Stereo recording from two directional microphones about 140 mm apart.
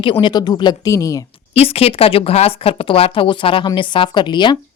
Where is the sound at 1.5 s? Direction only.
45° left (ahead or behind).